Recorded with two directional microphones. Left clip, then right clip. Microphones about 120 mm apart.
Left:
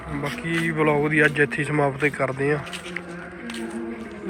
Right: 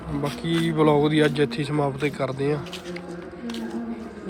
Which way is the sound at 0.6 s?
50° right (ahead or behind).